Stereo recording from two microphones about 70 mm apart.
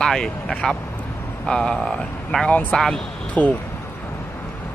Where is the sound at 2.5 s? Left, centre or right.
Centre.